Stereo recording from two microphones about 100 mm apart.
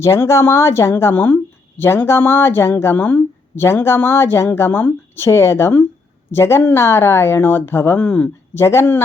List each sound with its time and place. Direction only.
0.0 s speech: 30° left (ahead or behind)